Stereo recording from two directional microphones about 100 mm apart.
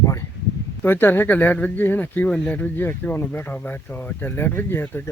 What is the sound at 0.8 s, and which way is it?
Speech, 20° left (ahead or behind).